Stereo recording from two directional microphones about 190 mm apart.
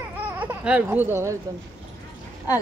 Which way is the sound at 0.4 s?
10° right (ahead or behind).